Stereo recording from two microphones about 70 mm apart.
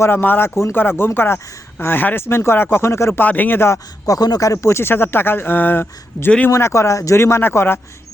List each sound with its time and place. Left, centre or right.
0.0 s speech: left
3.2 s speech: left
4.0 s speech: left
6.5 s speech: left
7.2 s speech: left